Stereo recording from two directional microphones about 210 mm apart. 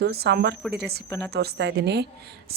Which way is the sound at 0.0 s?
50° right (ahead or behind).